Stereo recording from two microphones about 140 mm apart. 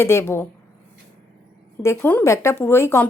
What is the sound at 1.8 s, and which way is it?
Speech, 15° left (ahead or behind).